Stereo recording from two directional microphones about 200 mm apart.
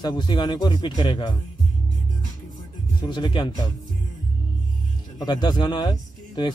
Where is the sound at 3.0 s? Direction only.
25° left (ahead or behind).